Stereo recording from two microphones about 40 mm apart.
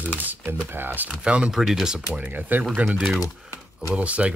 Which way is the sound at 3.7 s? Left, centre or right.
Right.